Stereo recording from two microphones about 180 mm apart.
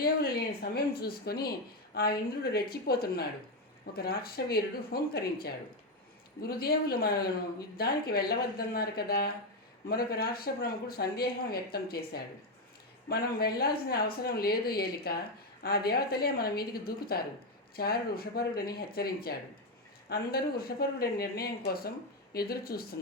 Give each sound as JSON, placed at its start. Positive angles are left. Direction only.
{"t": 0.9, "sound": "speech", "side_deg": 60}